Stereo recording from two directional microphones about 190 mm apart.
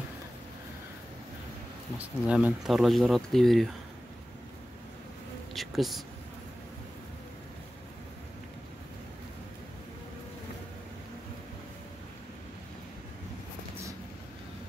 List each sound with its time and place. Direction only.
2.0 s speech: 5° right (ahead or behind)
5.5 s speech: centre (ahead or behind)